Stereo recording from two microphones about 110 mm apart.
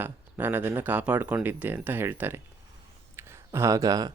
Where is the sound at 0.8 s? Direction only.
15° right (ahead or behind).